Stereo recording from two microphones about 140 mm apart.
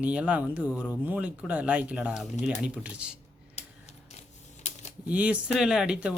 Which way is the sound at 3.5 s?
50° left (ahead or behind).